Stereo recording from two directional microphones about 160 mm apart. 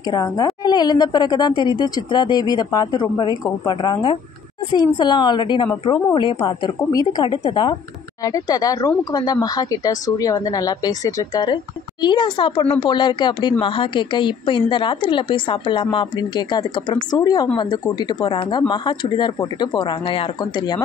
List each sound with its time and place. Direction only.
0.1 s speech: 25° left (ahead or behind)